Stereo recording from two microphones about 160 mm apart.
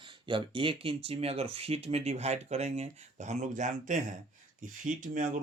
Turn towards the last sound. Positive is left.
turn(degrees=-55)  # may be behind; listen again after turning